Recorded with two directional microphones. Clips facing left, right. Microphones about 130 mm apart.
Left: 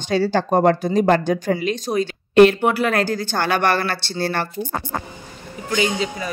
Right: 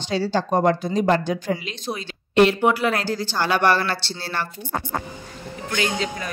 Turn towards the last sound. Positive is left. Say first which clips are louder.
# left 3 dB
turn(degrees=5)  # may be behind; listen again after turning